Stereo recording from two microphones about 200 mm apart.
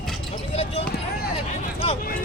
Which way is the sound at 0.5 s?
30° left (ahead or behind).